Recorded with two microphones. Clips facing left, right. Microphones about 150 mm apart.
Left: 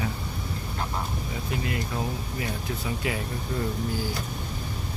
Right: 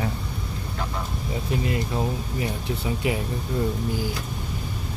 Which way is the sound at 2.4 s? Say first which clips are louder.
Right 3 dB; 25° right (ahead or behind).